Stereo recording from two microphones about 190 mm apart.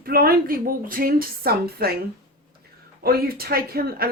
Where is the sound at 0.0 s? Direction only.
50° right (ahead or behind).